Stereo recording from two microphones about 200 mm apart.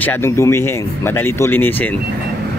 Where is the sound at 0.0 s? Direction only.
10° left (ahead or behind).